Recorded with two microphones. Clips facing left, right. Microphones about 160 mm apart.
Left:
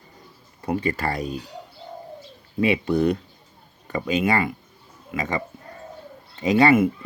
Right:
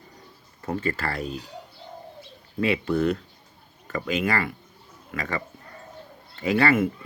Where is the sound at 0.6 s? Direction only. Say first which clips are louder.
Left 3 dB; 15° left (ahead or behind).